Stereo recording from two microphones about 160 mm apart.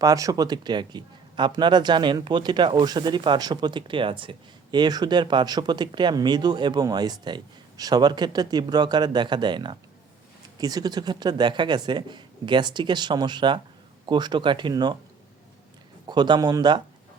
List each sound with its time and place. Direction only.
0.0 s speech: 20° right (ahead or behind)
16.0 s speech: 25° right (ahead or behind)